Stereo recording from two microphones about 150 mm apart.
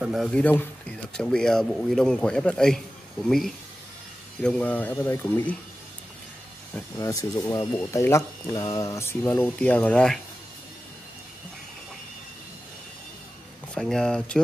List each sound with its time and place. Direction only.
0.0 s speech: centre (ahead or behind)
6.7 s speech: 20° left (ahead or behind); by 10.2 s 5° left (ahead or behind)
13.7 s speech: 5° left (ahead or behind)